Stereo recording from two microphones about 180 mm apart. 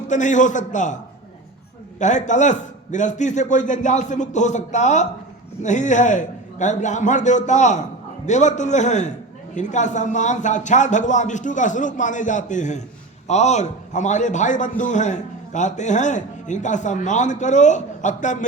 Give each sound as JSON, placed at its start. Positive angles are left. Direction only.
{"t": 0.1, "sound": "a man's voice", "side_deg": 45}
{"t": 2.0, "sound": "a man's voice", "side_deg": 40}